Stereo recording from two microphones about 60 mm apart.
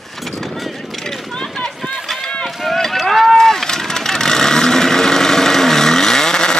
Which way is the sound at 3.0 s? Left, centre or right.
Centre.